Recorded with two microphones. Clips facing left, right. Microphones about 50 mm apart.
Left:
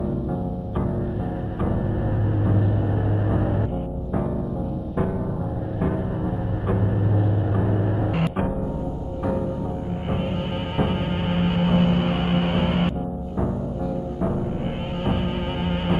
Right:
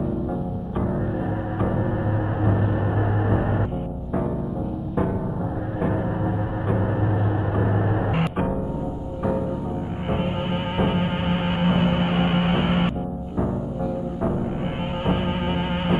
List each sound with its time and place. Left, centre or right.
5.8 s music: centre
10.8 s music: centre
15.0 s music: centre